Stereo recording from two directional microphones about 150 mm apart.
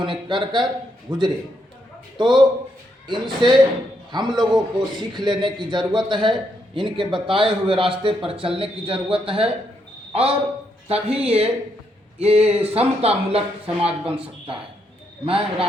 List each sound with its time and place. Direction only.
0.0 s a man's voice: 35° right (ahead or behind)
13.7 s speech: 5° right (ahead or behind)
14.2 s speech: 35° right (ahead or behind)